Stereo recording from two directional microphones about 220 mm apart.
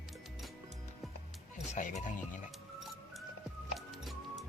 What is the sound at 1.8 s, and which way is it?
Speech, 35° left (ahead or behind).